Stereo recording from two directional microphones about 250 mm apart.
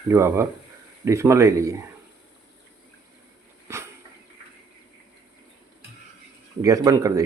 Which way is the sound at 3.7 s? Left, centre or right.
Centre.